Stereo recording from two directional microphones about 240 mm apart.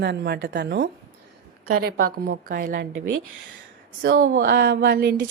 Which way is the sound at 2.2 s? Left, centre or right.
Right.